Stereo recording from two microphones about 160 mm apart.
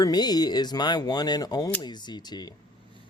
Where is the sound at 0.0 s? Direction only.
25° left (ahead or behind).